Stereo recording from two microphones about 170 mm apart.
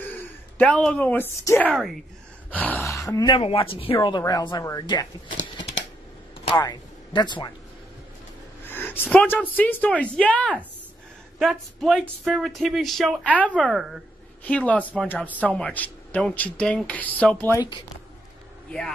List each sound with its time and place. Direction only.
0.0 s speech: 10° left (ahead or behind)
6.4 s speech: 25° left (ahead or behind)
8.6 s a sound: 10° left (ahead or behind)
9.1 s speech: 5° left (ahead or behind)
13.5 s speech: 5° right (ahead or behind)
14.4 s speech: 10° left (ahead or behind)